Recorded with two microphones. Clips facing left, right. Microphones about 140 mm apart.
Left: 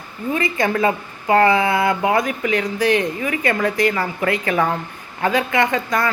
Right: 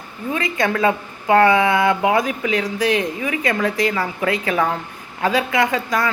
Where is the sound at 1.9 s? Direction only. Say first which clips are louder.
Right 1 dB; 15° right (ahead or behind).